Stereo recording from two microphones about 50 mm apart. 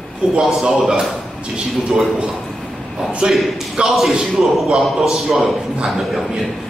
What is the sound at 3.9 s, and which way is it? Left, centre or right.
Speech, centre.